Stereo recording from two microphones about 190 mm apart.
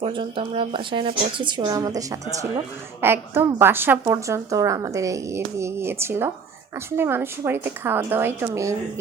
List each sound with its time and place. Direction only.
0.0 s a woman's voice: 25° right (ahead or behind)